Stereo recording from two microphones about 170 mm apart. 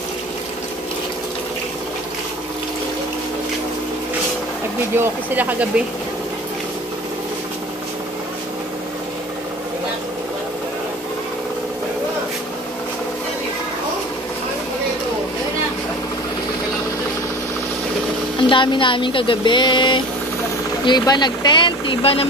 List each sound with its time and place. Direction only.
4.9 s speech: 10° right (ahead or behind)
18.5 s speech: 30° left (ahead or behind)